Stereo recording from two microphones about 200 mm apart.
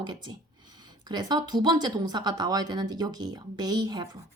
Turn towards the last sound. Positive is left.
turn(degrees=-20)  # may be behind; listen again after turning